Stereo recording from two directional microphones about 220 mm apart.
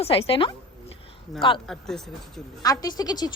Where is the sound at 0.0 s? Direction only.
25° left (ahead or behind).